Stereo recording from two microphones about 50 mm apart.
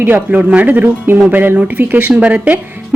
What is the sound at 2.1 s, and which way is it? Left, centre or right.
Speech, right.